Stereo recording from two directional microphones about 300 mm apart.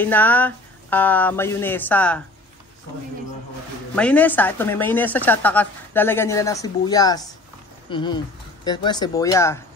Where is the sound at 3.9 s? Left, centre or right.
Centre.